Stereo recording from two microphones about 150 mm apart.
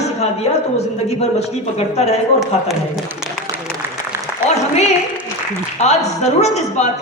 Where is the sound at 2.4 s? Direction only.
Centre (ahead or behind).